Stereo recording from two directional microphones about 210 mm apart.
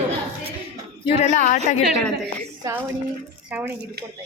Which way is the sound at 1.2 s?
35° left (ahead or behind).